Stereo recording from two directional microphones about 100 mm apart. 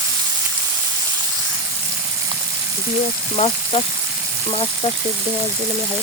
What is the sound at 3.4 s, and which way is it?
Speech, 75° left (ahead or behind).